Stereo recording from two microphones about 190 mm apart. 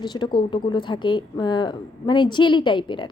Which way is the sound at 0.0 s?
25° left (ahead or behind).